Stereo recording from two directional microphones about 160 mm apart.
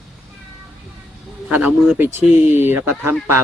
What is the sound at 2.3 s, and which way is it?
Speech, 45° left (ahead or behind).